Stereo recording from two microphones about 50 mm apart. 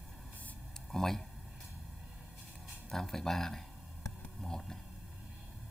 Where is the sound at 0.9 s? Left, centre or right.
Centre.